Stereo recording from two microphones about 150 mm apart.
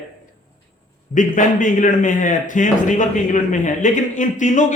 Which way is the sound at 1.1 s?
60° left (ahead or behind).